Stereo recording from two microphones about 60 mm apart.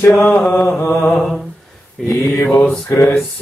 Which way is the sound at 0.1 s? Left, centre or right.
Left.